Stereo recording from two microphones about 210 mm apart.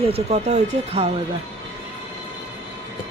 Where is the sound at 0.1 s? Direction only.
30° right (ahead or behind).